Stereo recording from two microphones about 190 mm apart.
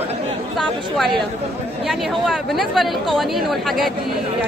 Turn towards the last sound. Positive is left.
turn(degrees=0)  # may be behind; listen again after turning